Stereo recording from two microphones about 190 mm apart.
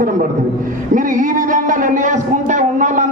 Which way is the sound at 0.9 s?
45° right (ahead or behind).